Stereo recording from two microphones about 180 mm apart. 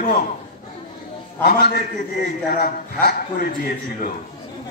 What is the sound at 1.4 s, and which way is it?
A man's voice, 55° left (ahead or behind).